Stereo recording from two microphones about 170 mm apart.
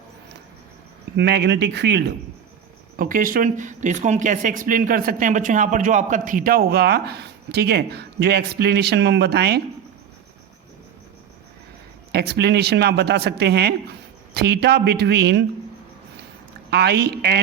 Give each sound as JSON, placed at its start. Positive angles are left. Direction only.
{"t": 1.1, "sound": "speech", "side_deg": -85}
{"t": 2.9, "sound": "speech", "side_deg": -55}
{"t": 12.1, "sound": "speech", "side_deg": -70}
{"t": 16.6, "sound": "speech", "side_deg": -75}